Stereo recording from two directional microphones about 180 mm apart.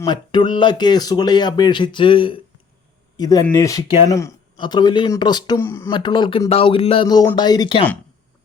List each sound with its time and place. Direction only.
0.0 s speech: 25° left (ahead or behind)